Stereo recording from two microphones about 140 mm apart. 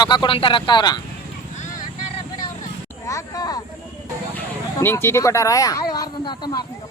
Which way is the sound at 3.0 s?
25° left (ahead or behind).